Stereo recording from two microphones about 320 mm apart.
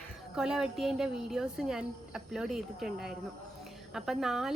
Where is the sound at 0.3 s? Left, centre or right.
Centre.